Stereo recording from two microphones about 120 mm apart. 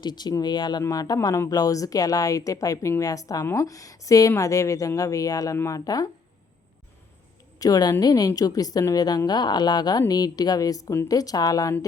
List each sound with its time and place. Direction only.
0.0 s a woman's voice: 35° left (ahead or behind)
7.6 s a woman's voice: 30° left (ahead or behind)